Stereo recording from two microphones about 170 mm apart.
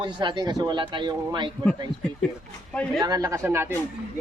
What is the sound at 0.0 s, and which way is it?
Speech, 25° right (ahead or behind).